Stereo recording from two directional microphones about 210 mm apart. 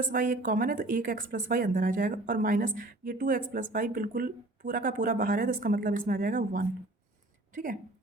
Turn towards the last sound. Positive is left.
turn(degrees=-40)  # may be behind; listen again after turning